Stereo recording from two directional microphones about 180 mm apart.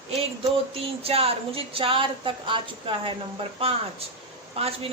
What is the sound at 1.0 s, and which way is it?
A woman's voice, 30° right (ahead or behind).